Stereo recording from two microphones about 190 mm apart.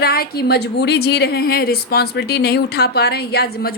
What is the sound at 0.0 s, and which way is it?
A woman's voice, 55° left (ahead or behind).